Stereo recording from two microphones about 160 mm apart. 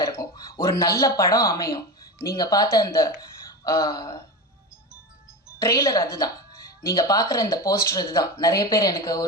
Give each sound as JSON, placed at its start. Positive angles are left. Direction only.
{"t": 0.2, "sound": "speech", "side_deg": 20}
{"t": 5.5, "sound": "speech", "side_deg": 20}